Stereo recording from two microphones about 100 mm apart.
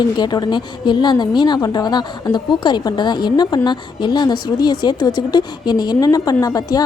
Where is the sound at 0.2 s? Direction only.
45° left (ahead or behind).